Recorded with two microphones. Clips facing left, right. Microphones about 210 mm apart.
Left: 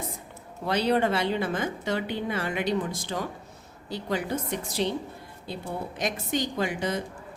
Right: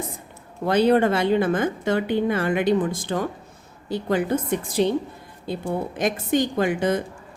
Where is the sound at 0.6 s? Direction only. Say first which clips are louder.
Right 6 dB; 50° right (ahead or behind).